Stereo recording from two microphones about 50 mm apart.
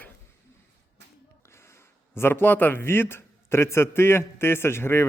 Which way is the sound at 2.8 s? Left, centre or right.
Left.